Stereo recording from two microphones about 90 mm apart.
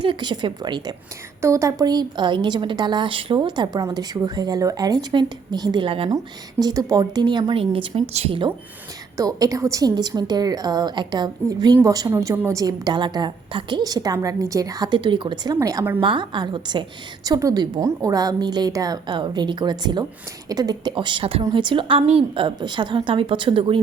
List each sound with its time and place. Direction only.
0.0 s speech: 65° right (ahead or behind)
1.4 s a woman's voice: 30° right (ahead or behind)
1.8 s speech: 50° right (ahead or behind); by 3.4 s 80° right
3.4 s a woman's voice: 55° right (ahead or behind)
5.8 s speech: 80° right
6.1 s speech: 45° right (ahead or behind); by 8.4 s 90° right
9.1 s a woman's voice: 40° right (ahead or behind)
9.9 s a woman's voice: 50° right (ahead or behind)
11.8 s a woman's voice: 40° right (ahead or behind)
14.9 s speech: 60° right (ahead or behind)
17.2 s a woman's voice: 45° right (ahead or behind)
19.1 s a woman's voice: 55° right (ahead or behind)
20.9 s a woman's voice: 65° right (ahead or behind); by 21.4 s 80° right
21.5 s a woman's voice: 65° right (ahead or behind)